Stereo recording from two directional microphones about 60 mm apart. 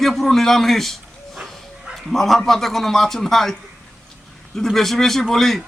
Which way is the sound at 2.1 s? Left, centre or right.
Centre.